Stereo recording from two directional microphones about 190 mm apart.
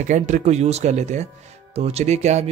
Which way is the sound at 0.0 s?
40° right (ahead or behind).